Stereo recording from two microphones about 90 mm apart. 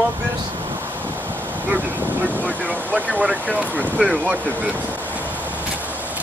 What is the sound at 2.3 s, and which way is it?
Speech, 15° left (ahead or behind).